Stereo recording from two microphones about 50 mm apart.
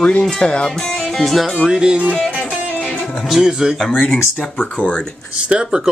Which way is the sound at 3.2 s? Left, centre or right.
Centre.